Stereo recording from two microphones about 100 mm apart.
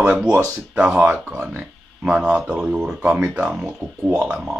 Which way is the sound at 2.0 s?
10° right (ahead or behind).